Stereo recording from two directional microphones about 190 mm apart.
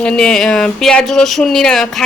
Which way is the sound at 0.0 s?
5° left (ahead or behind).